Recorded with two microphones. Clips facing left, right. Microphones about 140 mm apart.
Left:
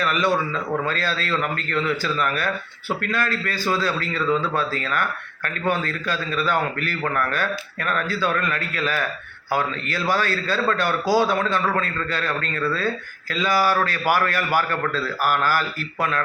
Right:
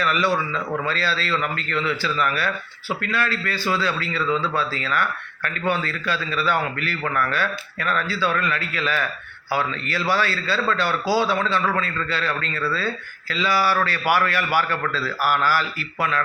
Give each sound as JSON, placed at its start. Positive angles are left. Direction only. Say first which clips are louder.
{"t": 0.0, "sound": "speech", "louder": "even", "side_deg": 45}